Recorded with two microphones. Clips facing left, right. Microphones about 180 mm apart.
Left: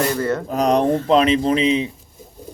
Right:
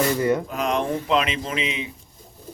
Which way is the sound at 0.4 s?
40° left (ahead or behind).